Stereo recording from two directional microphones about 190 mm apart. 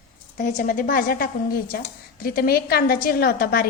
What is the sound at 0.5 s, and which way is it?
A woman's voice, 45° left (ahead or behind).